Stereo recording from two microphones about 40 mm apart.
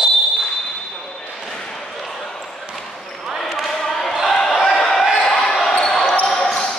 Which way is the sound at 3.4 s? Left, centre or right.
Centre.